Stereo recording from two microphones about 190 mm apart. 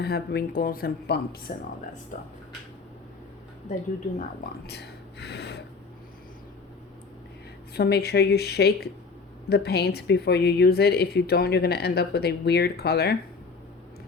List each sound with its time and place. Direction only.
0.0 s speech: 55° left (ahead or behind)
2.1 s speech: 45° left (ahead or behind)
4.6 s a sound: 60° left (ahead or behind)
7.7 s speech: 55° left (ahead or behind)